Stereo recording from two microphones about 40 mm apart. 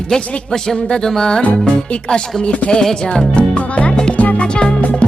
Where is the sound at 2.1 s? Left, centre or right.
Left.